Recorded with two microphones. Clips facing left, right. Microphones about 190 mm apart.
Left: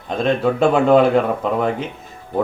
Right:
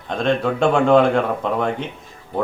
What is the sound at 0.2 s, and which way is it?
Speech, 5° left (ahead or behind).